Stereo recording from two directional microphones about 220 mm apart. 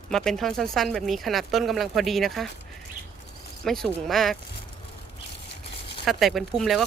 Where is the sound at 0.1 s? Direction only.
Centre (ahead or behind).